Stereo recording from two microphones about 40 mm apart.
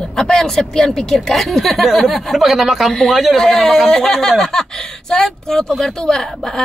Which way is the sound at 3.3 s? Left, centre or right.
Centre.